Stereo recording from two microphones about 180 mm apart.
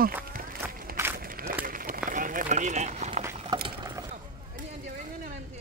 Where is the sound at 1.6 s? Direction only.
50° right (ahead or behind).